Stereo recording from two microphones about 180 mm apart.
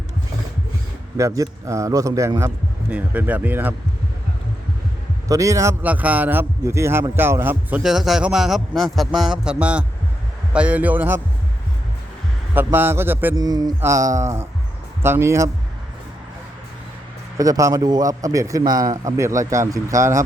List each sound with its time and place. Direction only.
1.1 s a man's voice: 20° right (ahead or behind)
5.3 s a man's voice: 20° right (ahead or behind)
12.5 s a man's voice: 10° right (ahead or behind)
17.3 s a man's voice: 20° right (ahead or behind)